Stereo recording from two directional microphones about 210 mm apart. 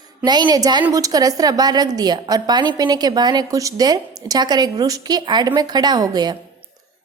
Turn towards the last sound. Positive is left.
turn(degrees=-20)  # may be behind; listen again after turning